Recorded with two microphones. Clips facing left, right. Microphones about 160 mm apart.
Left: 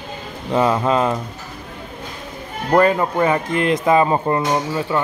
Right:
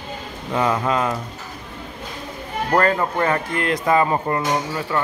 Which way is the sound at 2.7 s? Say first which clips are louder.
Left 4 dB; 15° left (ahead or behind).